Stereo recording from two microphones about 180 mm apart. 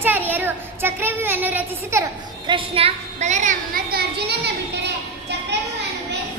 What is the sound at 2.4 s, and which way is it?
A woman's voice, 30° right (ahead or behind).